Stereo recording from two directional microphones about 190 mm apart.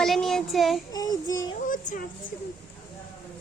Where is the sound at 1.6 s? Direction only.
45° left (ahead or behind).